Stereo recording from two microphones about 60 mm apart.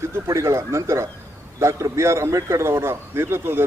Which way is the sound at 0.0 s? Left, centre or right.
Right.